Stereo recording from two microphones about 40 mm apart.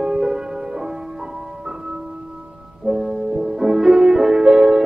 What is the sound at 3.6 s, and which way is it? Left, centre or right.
Music, centre.